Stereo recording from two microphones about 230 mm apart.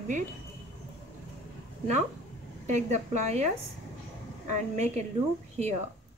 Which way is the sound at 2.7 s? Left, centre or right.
Right.